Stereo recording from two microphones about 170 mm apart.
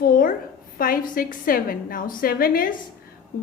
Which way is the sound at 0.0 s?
55° left (ahead or behind).